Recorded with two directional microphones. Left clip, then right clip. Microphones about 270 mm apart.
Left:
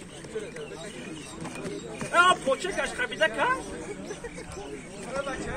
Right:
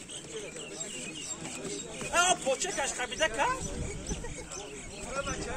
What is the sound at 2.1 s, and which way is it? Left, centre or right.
Speech, right.